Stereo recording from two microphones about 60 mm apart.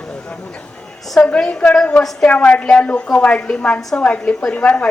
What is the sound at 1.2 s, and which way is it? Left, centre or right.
A woman's voice, centre.